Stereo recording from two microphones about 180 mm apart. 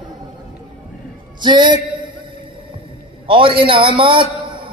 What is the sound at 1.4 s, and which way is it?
Speech, 25° right (ahead or behind).